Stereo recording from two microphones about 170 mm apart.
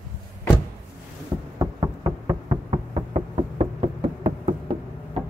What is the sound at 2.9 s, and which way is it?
Knock, 35° right (ahead or behind).